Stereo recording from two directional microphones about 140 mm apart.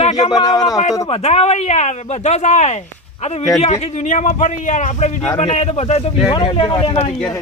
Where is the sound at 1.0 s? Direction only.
45° left (ahead or behind).